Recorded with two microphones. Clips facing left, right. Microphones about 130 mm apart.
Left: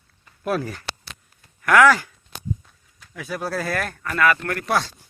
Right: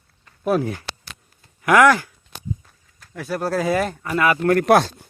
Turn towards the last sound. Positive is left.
turn(degrees=-60)  # may be behind; listen again after turning